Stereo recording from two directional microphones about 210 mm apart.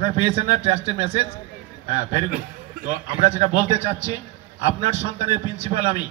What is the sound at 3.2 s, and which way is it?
A man's voice, 30° right (ahead or behind).